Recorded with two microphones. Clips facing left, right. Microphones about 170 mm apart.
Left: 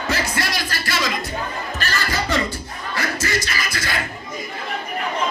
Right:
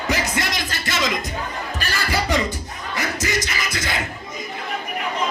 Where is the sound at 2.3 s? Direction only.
20° right (ahead or behind).